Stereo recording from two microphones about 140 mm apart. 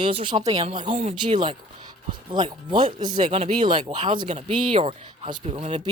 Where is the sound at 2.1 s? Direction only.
35° right (ahead or behind).